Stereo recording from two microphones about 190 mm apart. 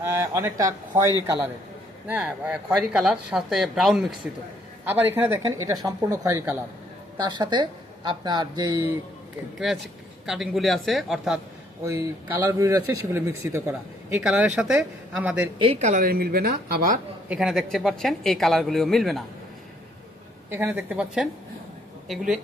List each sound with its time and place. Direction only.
0.0 s speech: 15° right (ahead or behind)
7.2 s a woman's voice: 25° right (ahead or behind)
9.6 s speech: centre (ahead or behind)
11.9 s speech: 15° right (ahead or behind)
15.5 s a woman's voice: 30° right (ahead or behind); by 17.0 s 50° right (ahead or behind)
17.2 s speech: 5° right (ahead or behind)
20.5 s speech: 10° right (ahead or behind)